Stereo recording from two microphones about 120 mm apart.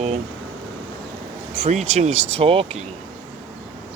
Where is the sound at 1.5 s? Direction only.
60° right (ahead or behind).